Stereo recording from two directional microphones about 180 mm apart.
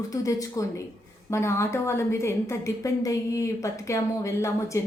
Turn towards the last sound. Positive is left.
turn(degrees=15)  # may be behind; listen again after turning